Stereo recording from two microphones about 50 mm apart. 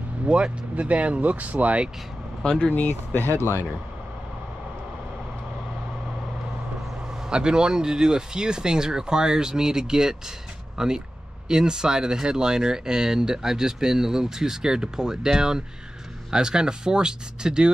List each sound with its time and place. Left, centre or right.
0.3 s speech: right
2.7 s speech: left
7.2 s speech: centre